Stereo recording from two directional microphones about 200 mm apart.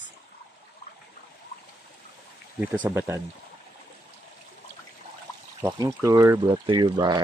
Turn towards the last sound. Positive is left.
turn(degrees=-20)  # may be behind; listen again after turning